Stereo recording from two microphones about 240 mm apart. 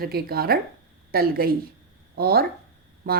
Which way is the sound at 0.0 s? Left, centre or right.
Right.